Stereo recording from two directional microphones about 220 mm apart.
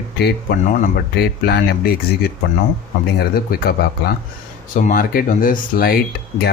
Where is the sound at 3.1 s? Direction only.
45° left (ahead or behind).